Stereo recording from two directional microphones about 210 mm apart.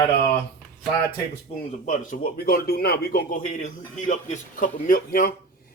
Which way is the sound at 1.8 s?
40° left (ahead or behind).